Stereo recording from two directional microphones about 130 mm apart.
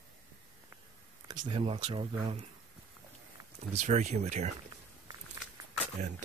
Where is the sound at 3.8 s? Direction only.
65° right (ahead or behind).